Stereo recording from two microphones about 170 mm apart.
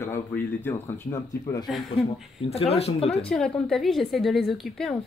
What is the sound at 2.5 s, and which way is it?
Speech, 35° left (ahead or behind).